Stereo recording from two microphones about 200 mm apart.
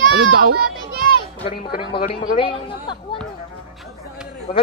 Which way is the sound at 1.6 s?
25° left (ahead or behind).